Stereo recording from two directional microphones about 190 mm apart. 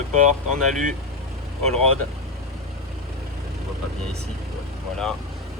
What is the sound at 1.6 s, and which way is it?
Speech, 35° right (ahead or behind).